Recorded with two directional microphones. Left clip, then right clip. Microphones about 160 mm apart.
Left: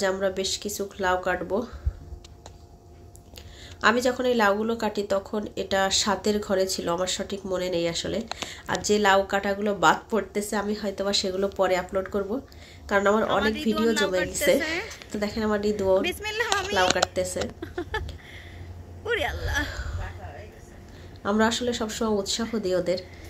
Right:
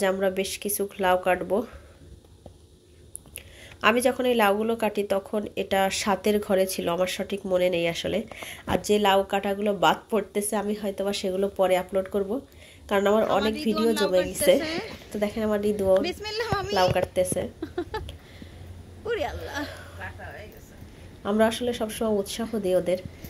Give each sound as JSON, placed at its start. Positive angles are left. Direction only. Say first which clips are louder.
{"t": 0.0, "sound": "speech", "louder": "right 1 dB", "side_deg": -15}
{"t": 3.3, "sound": "speech", "louder": "left 1 dB", "side_deg": -10}
{"t": 19.0, "sound": "a sound", "louder": "left 2 dB", "side_deg": -10}
{"t": 21.2, "sound": "speech", "louder": "right 1 dB", "side_deg": -10}